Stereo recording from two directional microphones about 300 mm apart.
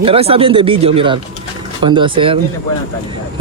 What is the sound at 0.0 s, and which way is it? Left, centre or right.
Speech, centre.